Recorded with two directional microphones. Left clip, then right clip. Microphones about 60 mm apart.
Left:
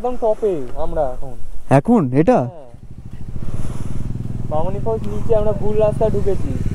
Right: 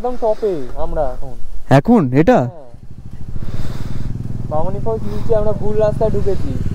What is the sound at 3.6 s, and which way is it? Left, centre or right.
Vehicle, right.